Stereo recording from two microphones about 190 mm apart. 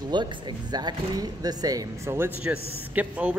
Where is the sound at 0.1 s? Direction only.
25° right (ahead or behind).